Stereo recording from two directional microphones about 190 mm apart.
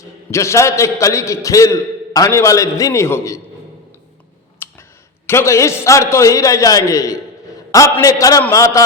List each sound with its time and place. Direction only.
0.3 s a man's voice: 15° left (ahead or behind)
4.6 s a sound: 10° left (ahead or behind)
5.2 s a man's voice: 15° left (ahead or behind)